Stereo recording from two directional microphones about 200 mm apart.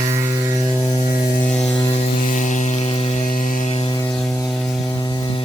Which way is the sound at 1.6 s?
25° left (ahead or behind).